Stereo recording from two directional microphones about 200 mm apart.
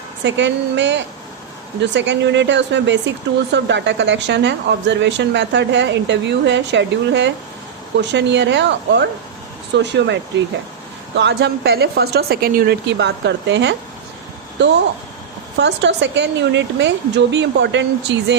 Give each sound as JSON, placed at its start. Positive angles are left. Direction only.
{"t": 0.3, "sound": "speech", "side_deg": -65}